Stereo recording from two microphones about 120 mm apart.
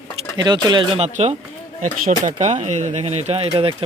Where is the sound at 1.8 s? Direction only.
90° right.